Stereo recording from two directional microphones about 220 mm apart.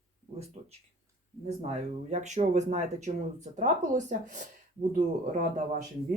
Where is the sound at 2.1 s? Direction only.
30° right (ahead or behind).